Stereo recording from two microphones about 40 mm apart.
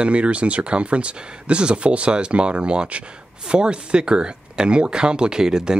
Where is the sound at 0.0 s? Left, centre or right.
Right.